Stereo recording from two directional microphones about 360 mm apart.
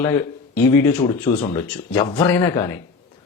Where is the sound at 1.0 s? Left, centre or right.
Centre.